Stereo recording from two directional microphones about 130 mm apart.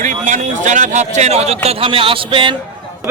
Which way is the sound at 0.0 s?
75° right (ahead or behind).